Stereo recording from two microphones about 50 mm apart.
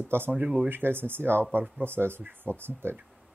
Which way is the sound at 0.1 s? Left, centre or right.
Right.